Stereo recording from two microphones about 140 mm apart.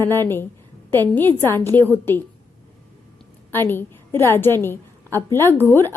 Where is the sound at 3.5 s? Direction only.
15° left (ahead or behind).